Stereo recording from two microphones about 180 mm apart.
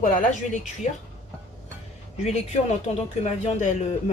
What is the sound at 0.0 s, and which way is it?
Speech, 50° left (ahead or behind).